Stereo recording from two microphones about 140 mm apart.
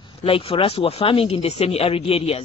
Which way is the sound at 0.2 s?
45° left (ahead or behind).